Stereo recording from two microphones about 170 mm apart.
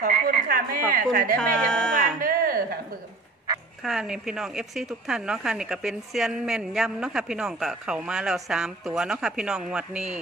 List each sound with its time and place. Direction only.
0.0 s speech: 55° right (ahead or behind)
1.4 s a woman's voice: 5° left (ahead or behind)
2.1 s a sound: 55° right (ahead or behind)
3.8 s a woman's voice: centre (ahead or behind)